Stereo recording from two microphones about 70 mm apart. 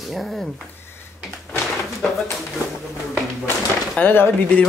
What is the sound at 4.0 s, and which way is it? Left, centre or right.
Speech, left.